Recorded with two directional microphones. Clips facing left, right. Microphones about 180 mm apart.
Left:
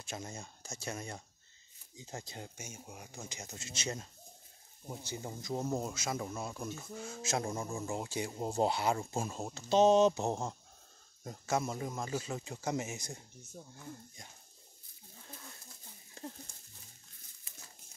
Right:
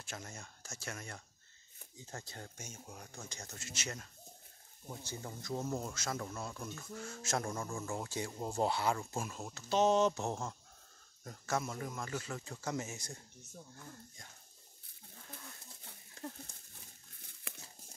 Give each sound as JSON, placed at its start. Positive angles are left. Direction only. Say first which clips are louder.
{"t": 0.0, "sound": "speech", "louder": "left 4 dB", "side_deg": 20}
{"t": 3.5, "sound": "speech", "louder": "left 5 dB", "side_deg": 20}
{"t": 8.9, "sound": "speech", "louder": "left 4 dB", "side_deg": 30}